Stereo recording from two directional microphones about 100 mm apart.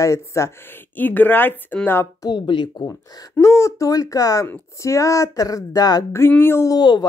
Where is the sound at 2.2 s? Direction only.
50° left (ahead or behind).